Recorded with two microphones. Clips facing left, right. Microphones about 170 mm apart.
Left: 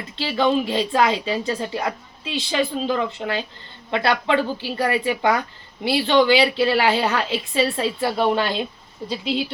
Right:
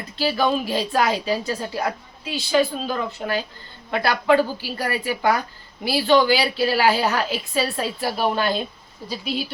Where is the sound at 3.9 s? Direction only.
25° left (ahead or behind).